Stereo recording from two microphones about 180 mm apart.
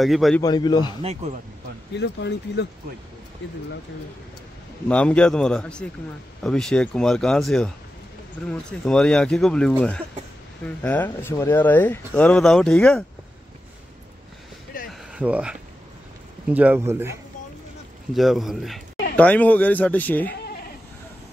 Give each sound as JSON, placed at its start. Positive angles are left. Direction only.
{"t": 0.0, "sound": "speech", "side_deg": 0}
{"t": 0.4, "sound": "a man's voice", "side_deg": 25}
{"t": 2.0, "sound": "speech", "side_deg": 70}
{"t": 4.8, "sound": "speech", "side_deg": 5}
{"t": 14.9, "sound": "a sound", "side_deg": -5}
{"t": 16.5, "sound": "speech", "side_deg": -10}
{"t": 18.1, "sound": "speech", "side_deg": 0}